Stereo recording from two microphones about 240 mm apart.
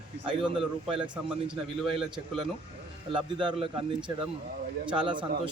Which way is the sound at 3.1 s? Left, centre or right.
Right.